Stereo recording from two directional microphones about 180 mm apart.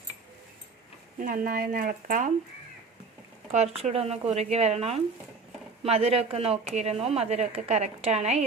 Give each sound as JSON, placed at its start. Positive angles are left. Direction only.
{"t": 1.2, "sound": "speech", "side_deg": -50}
{"t": 3.5, "sound": "a woman's voice", "side_deg": -35}